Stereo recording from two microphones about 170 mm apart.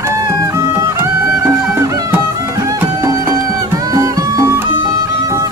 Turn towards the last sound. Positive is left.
turn(degrees=-20)  # may be behind; listen again after turning